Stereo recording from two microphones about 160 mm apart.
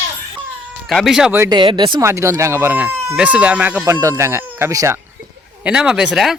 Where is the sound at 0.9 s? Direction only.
Centre (ahead or behind).